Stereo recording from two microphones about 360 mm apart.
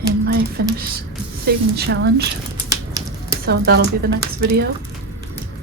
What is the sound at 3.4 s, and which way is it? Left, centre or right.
Speech, right.